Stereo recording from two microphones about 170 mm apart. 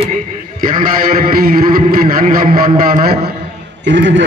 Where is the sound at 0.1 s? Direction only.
55° right (ahead or behind).